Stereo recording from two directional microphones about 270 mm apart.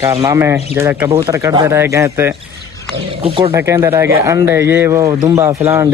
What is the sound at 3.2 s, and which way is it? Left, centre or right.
Speech, right.